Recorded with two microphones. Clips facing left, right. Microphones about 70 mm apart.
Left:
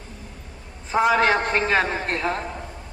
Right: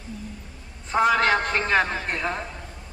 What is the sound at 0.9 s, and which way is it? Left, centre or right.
A man's voice, centre.